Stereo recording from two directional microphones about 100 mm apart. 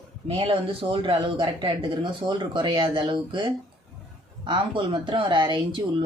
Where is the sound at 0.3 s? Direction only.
60° right (ahead or behind).